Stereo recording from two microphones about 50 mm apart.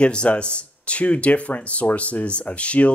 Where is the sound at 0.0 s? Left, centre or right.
Left.